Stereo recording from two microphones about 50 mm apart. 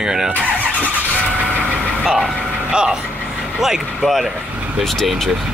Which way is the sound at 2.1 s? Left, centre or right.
Centre.